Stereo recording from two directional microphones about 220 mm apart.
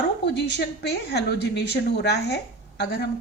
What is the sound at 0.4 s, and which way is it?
A woman's voice, 50° left (ahead or behind).